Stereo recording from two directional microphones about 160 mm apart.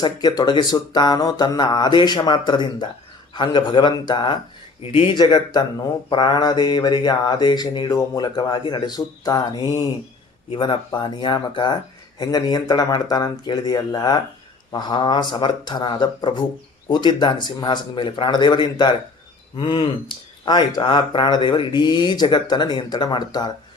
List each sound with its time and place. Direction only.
0.0 s speech: 25° left (ahead or behind)